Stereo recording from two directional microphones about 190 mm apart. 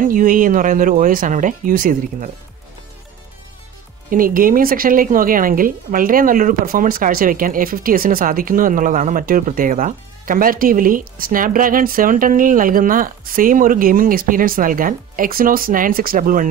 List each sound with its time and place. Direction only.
0.0 s a woman's voice: 45° right (ahead or behind)
4.1 s a woman's voice: 45° right (ahead or behind)